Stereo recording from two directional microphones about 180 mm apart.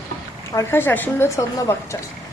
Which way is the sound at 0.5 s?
10° left (ahead or behind).